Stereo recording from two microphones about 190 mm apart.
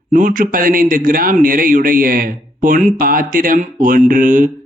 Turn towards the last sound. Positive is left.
turn(degrees=-45)  # may be behind; listen again after turning